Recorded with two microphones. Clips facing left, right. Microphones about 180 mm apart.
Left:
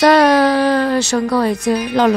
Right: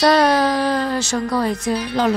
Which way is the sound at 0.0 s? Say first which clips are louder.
Left 4 dB; 70° left (ahead or behind).